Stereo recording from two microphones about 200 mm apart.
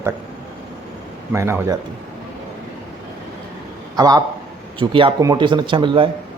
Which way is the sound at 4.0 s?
20° right (ahead or behind).